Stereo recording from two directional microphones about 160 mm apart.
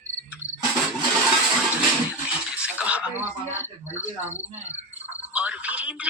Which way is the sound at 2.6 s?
10° right (ahead or behind).